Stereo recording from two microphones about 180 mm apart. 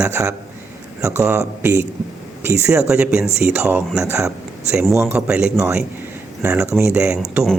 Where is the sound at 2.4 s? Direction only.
5° right (ahead or behind).